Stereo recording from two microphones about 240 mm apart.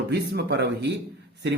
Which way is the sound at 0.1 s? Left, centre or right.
Right.